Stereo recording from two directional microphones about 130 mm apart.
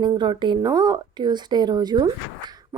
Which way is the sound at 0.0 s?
35° right (ahead or behind).